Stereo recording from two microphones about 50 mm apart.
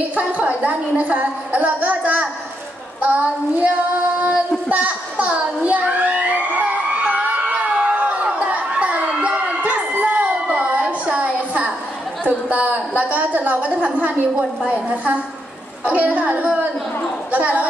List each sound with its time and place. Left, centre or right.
0.1 s a woman's voice: right
3.0 s child singing: right
12.3 s a sound: right
15.8 s a child's voice: right